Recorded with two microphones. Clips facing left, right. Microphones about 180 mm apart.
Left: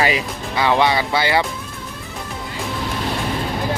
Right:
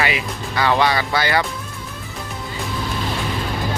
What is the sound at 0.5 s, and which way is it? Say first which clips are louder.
Speech: left 1 dB; 20° left (ahead or behind).